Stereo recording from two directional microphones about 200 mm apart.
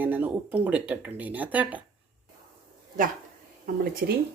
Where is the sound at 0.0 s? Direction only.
10° right (ahead or behind).